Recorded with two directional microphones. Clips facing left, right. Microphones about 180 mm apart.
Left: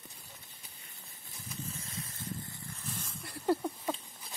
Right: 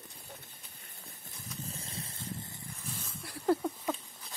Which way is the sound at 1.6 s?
35° right (ahead or behind).